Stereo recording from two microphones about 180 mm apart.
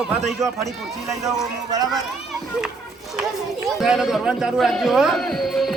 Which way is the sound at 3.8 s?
Centre (ahead or behind).